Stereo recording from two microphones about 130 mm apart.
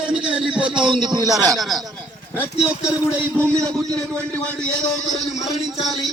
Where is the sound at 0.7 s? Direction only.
35° right (ahead or behind).